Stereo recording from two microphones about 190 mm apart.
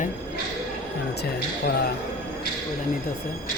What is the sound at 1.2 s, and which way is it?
Speech, 60° left (ahead or behind).